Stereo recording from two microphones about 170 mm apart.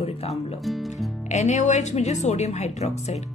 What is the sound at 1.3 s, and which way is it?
A woman's voice, 40° left (ahead or behind).